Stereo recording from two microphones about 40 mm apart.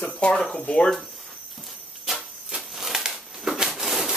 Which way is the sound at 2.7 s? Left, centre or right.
Centre.